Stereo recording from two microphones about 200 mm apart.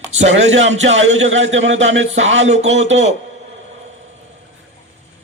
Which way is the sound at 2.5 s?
35° right (ahead or behind).